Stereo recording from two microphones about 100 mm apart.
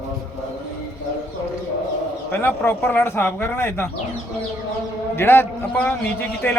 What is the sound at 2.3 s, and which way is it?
A man's voice, 20° left (ahead or behind).